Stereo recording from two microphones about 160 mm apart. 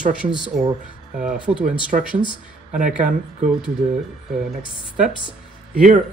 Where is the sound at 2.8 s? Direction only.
5° right (ahead or behind).